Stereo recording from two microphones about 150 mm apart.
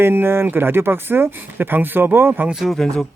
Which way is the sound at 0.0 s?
15° right (ahead or behind).